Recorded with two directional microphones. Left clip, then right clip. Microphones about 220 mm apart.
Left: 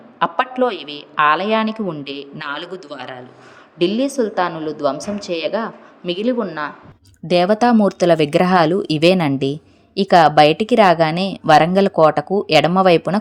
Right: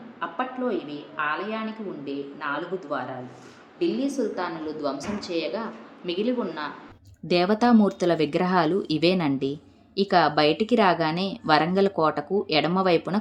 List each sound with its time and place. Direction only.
0.2 s a woman's voice: 45° left (ahead or behind)
3.8 s speech: 40° left (ahead or behind)